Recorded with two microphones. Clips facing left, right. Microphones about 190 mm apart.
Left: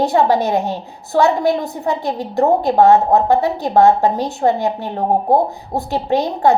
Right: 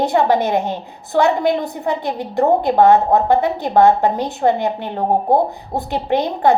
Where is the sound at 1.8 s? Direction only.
55° right (ahead or behind).